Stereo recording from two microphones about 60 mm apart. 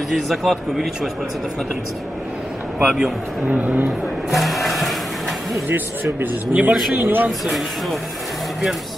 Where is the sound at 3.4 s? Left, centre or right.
Right.